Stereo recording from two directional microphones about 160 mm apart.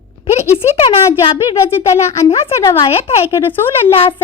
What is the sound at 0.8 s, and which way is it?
Speech, 40° left (ahead or behind).